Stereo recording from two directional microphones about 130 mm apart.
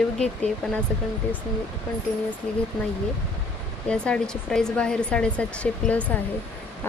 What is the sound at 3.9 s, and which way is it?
Speech, 5° left (ahead or behind).